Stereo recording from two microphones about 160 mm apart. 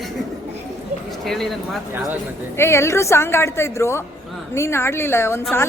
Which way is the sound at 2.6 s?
15° left (ahead or behind).